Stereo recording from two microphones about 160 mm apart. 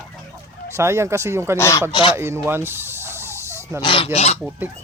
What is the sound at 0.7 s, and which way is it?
Speech, 15° right (ahead or behind).